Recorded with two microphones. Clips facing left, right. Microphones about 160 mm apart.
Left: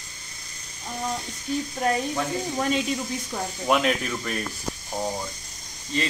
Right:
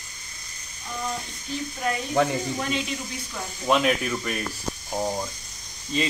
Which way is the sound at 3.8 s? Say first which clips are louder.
Right 1 dB; 5° right (ahead or behind).